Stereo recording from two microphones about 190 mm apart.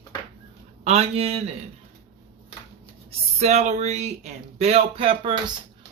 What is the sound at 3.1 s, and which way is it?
Speech, 35° right (ahead or behind).